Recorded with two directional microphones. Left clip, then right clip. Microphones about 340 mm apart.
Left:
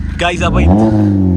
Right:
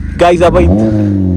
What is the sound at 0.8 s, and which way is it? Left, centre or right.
Speech, centre.